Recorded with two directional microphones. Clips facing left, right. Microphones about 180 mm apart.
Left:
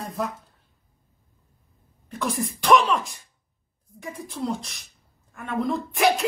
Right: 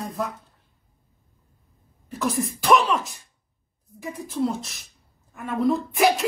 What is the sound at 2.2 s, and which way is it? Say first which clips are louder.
Speech: right 2 dB; centre (ahead or behind).